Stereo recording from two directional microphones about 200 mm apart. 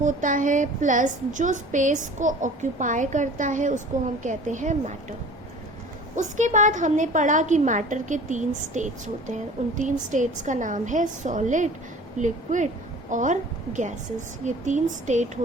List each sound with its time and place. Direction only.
0.0 s a woman's voice: 40° right (ahead or behind)
6.1 s a woman's voice: 40° right (ahead or behind)